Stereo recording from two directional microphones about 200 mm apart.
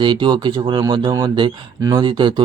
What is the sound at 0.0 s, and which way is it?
Speech, 25° right (ahead or behind).